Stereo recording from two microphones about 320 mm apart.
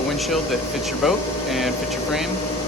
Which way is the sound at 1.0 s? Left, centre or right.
Centre.